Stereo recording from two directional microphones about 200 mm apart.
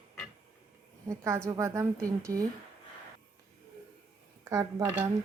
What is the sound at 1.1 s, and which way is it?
Speech, 15° right (ahead or behind).